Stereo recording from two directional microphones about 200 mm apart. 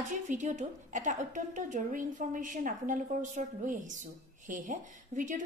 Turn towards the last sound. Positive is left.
turn(degrees=-40)  # may be behind; listen again after turning